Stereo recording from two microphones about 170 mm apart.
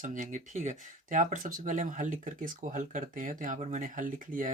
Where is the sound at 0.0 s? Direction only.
50° right (ahead or behind).